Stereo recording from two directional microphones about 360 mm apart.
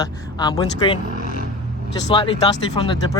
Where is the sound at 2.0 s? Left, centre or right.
Centre.